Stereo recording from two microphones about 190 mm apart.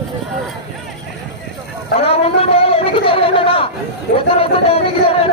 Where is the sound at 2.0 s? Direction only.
30° left (ahead or behind).